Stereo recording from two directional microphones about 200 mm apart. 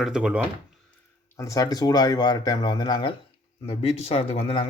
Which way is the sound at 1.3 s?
15° left (ahead or behind).